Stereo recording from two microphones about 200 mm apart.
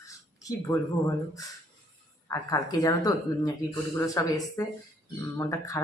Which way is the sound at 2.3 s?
15° left (ahead or behind).